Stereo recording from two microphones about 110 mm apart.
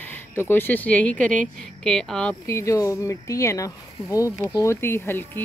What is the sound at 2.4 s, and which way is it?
Speech, 25° left (ahead or behind).